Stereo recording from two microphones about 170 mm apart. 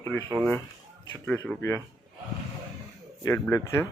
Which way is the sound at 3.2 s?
15° left (ahead or behind).